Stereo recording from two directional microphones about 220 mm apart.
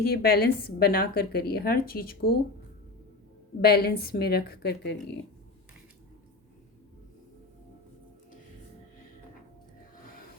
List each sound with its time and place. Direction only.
0.0 s a woman's voice: 45° left (ahead or behind)
3.6 s a woman's voice: 45° left (ahead or behind)